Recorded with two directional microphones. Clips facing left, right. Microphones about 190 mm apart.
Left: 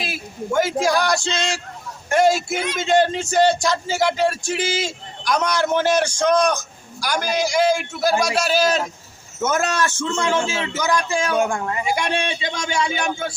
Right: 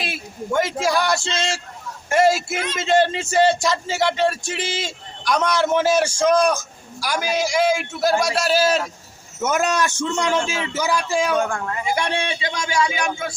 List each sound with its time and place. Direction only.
0.0 s a man's voice: centre (ahead or behind)
11.3 s a man's voice: 10° left (ahead or behind); by 13.3 s 30° left (ahead or behind)